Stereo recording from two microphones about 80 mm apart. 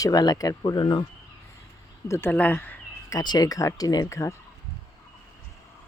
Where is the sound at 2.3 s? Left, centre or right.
Left.